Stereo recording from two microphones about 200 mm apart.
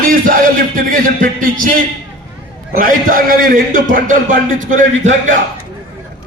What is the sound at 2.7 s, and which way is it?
A man's voice, 45° right (ahead or behind).